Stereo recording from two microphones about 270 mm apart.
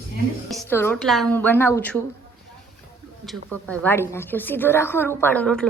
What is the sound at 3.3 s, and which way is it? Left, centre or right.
A woman's voice, centre.